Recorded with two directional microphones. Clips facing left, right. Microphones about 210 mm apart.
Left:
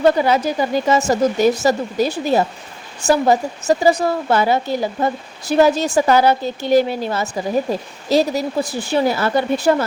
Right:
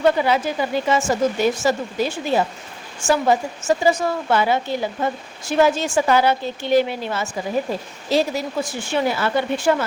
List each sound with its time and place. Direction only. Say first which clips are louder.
0.0 s a woman's voice: left 3 dB; 40° left (ahead or behind)